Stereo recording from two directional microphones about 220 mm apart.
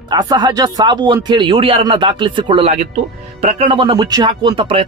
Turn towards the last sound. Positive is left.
turn(degrees=-20)  # may be behind; listen again after turning